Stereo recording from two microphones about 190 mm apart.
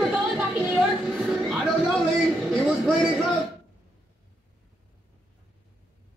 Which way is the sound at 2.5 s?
Centre (ahead or behind).